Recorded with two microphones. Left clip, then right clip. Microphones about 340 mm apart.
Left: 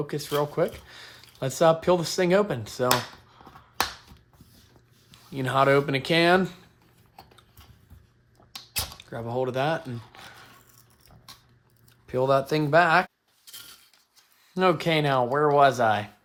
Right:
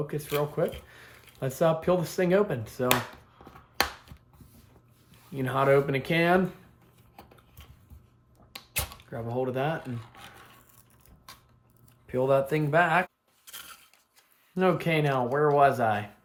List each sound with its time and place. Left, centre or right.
0.1 s speech: left
5.3 s speech: centre
9.0 s speech: centre
12.0 s speech: centre
14.5 s speech: centre